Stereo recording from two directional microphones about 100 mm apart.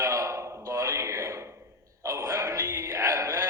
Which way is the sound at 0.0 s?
30° right (ahead or behind).